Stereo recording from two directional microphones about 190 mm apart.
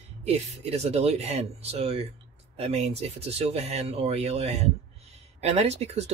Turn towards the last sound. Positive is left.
turn(degrees=-35)  # may be behind; listen again after turning